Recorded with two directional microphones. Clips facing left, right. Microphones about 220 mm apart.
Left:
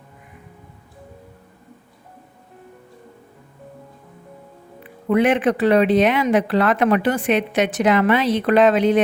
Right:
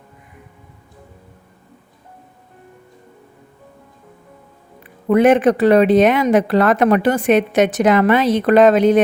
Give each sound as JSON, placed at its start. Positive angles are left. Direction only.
{"t": 5.0, "sound": "speech", "side_deg": -45}